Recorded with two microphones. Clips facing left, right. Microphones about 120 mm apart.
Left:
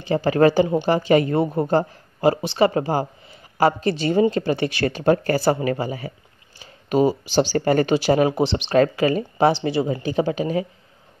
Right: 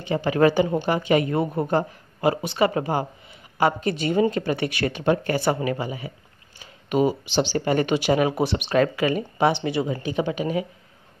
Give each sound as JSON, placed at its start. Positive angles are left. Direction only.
{"t": 0.0, "sound": "speech", "side_deg": 35}